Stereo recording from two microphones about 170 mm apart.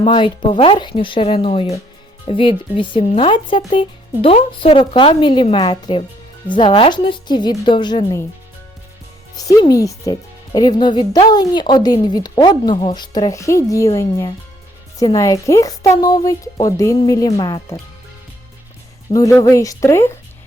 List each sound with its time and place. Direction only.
0.0 s speech: 30° left (ahead or behind)
9.4 s speech: 20° left (ahead or behind)
19.1 s speech: 20° left (ahead or behind)